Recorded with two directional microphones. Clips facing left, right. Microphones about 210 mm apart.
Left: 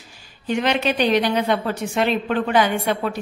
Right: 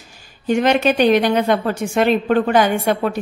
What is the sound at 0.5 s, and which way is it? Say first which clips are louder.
A woman's voice: right 5 dB; 45° right (ahead or behind).